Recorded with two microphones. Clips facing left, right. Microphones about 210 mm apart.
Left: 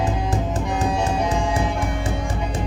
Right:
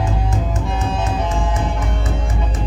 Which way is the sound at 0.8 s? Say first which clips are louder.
Left 1 dB; 15° left (ahead or behind).